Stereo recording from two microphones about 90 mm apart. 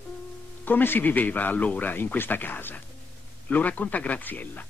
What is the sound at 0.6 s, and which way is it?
A man's voice, 25° left (ahead or behind).